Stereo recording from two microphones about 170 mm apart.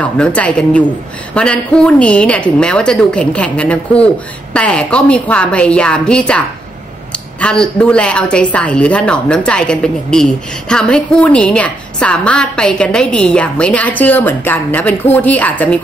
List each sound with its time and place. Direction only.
0.0 s a woman's voice: 5° left (ahead or behind)